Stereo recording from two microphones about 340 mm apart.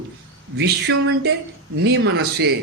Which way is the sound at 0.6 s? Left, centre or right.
Right.